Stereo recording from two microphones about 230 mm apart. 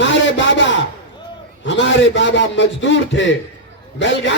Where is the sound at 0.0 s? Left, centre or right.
Left.